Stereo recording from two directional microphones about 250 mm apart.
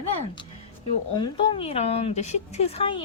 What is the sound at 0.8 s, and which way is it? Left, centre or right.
A woman's voice, centre.